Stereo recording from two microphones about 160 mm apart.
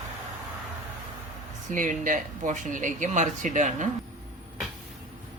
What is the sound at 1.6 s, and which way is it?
Speech, 55° right (ahead or behind).